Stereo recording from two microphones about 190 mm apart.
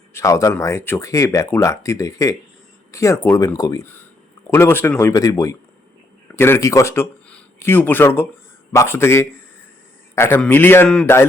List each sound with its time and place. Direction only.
0.1 s speech: 15° left (ahead or behind)